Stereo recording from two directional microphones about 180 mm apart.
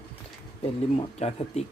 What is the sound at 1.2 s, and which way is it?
Speech, 35° left (ahead or behind).